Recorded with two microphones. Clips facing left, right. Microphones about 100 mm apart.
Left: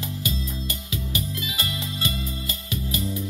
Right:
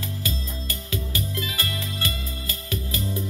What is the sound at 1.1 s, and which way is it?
Music, 20° left (ahead or behind).